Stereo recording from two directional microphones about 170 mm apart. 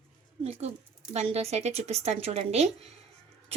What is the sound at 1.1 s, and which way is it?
Speech, 35° right (ahead or behind).